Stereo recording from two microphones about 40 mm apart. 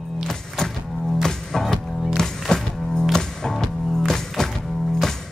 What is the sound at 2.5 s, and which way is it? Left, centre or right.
Music, centre.